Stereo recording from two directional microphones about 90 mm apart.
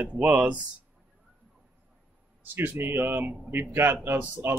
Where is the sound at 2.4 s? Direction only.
20° right (ahead or behind).